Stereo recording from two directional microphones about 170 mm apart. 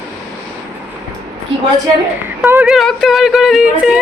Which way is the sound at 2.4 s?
15° right (ahead or behind).